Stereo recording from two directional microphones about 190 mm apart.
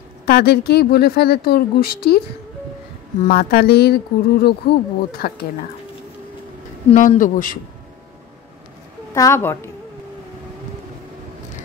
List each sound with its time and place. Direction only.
0.2 s speech: 55° left (ahead or behind)
3.3 s speech: 55° left (ahead or behind)
6.9 s speech: 40° left (ahead or behind)
9.1 s a woman's voice: 15° left (ahead or behind)